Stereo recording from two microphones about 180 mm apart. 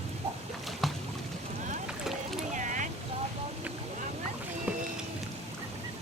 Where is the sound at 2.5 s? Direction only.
45° right (ahead or behind).